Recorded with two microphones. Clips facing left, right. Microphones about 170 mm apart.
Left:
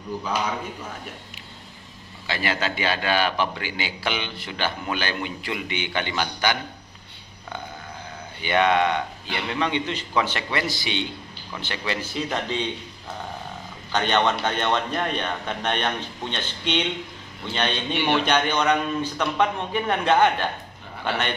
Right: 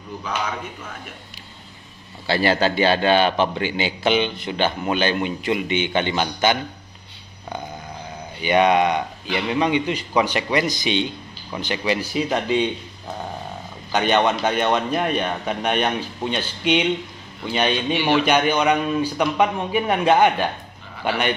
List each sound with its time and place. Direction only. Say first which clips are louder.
2.2 s a man's voice: right 8 dB; 35° right (ahead or behind)
8.4 s a man's voice: right 4 dB; 15° right (ahead or behind)
13.9 s a man's voice: right 3 dB; 10° right (ahead or behind)